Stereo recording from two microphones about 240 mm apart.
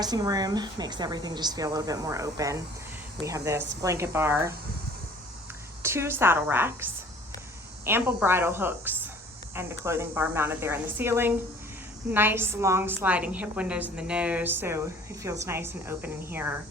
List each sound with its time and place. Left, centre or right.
0.0 s a woman's voice: centre
5.8 s a woman's voice: centre
7.9 s a woman's voice: centre